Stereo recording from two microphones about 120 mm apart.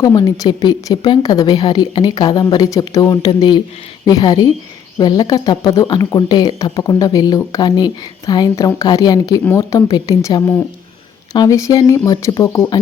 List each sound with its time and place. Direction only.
0.0 s a woman's voice: 30° left (ahead or behind)